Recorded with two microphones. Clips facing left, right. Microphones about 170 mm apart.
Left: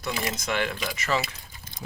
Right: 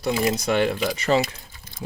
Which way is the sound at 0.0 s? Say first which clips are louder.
Right 8 dB; 30° right (ahead or behind).